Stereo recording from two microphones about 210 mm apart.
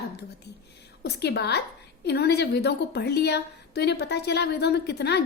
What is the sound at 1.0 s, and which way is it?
A woman's voice, 50° left (ahead or behind).